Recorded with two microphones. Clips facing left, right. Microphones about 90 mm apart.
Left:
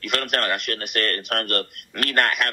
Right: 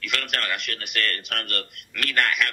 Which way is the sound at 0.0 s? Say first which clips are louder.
Left 5 dB; 45° left (ahead or behind).